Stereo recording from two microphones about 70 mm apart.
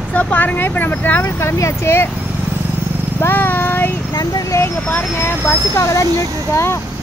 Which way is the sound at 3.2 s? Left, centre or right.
Left.